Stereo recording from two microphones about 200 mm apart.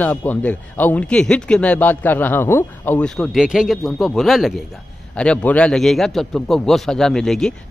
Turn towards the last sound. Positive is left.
turn(degrees=0)  # may be behind; listen again after turning